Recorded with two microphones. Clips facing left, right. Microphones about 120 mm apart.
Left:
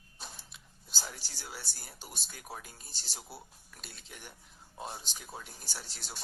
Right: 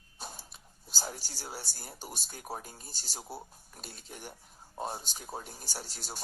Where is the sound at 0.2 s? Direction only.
45° right (ahead or behind).